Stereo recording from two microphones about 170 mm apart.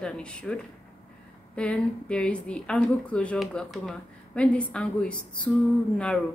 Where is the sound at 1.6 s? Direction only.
5° left (ahead or behind).